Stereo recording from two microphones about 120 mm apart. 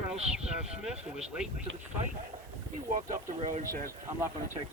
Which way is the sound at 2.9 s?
90° right.